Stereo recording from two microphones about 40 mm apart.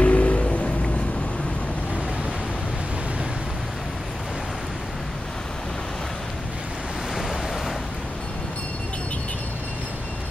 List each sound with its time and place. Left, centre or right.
0.0 s vehicle: left